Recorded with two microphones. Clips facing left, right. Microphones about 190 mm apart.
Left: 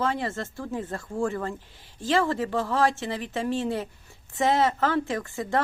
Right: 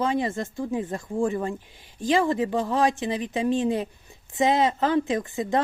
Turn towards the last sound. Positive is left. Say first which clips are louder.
# right 3 dB
turn(degrees=-20)  # may be behind; listen again after turning